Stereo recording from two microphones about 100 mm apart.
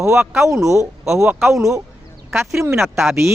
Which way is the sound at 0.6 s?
30° right (ahead or behind).